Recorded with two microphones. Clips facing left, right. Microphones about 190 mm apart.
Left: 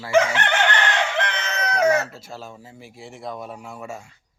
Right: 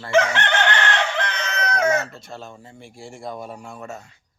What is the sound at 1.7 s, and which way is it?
Speech, 30° left (ahead or behind).